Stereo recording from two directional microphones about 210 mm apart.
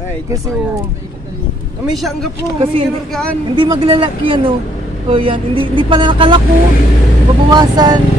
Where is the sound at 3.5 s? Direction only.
25° right (ahead or behind).